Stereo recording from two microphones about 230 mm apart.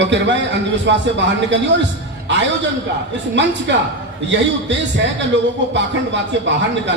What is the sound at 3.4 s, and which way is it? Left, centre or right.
Speech, right.